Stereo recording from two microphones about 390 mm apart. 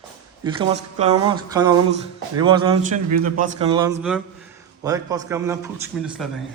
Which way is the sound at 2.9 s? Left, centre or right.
Right.